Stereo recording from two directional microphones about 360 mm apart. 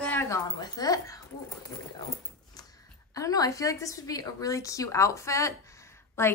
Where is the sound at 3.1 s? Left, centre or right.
Centre.